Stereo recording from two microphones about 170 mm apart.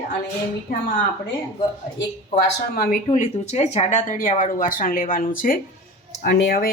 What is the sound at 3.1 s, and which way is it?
Speech, 45° left (ahead or behind).